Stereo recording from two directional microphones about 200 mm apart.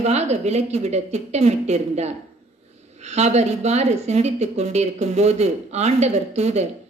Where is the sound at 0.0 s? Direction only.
35° right (ahead or behind).